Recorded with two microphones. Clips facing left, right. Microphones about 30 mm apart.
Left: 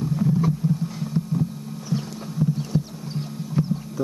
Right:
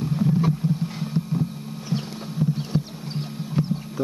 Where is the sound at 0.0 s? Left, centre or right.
Right.